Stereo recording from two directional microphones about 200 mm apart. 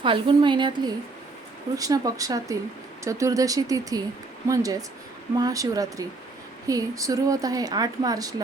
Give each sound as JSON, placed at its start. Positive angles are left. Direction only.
{"t": 0.0, "sound": "a woman's voice", "side_deg": -25}
{"t": 1.7, "sound": "speech", "side_deg": -15}